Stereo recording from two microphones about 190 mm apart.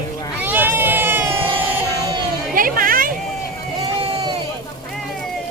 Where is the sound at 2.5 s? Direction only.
50° right (ahead or behind).